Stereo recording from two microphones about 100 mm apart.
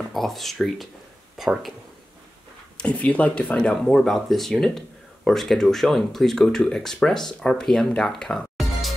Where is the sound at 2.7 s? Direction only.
10° left (ahead or behind).